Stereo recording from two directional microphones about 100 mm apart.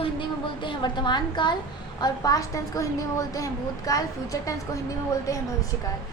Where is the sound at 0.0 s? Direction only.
55° left (ahead or behind).